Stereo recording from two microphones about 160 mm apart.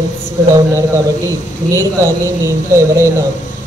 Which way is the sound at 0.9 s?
20° right (ahead or behind).